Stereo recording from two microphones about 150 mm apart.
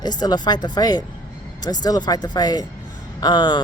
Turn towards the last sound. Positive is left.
turn(degrees=30)  # may be behind; listen again after turning